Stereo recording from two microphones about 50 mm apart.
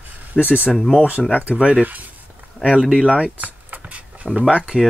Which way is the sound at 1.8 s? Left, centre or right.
Right.